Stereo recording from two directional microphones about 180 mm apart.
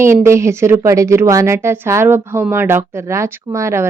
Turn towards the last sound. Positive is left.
turn(degrees=-15)  # may be behind; listen again after turning